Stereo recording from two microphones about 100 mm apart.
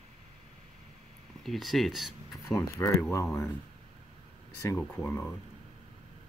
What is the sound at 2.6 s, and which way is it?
Speech, 25° left (ahead or behind).